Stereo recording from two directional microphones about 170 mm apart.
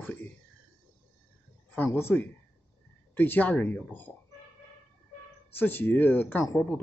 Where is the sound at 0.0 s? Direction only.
10° left (ahead or behind).